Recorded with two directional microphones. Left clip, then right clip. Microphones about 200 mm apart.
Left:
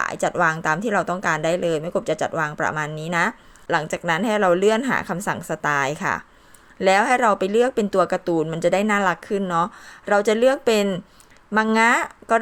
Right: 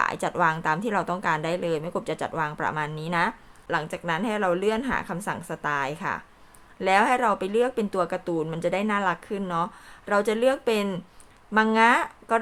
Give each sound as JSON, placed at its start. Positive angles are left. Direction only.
{"t": 0.0, "sound": "speech", "side_deg": 15}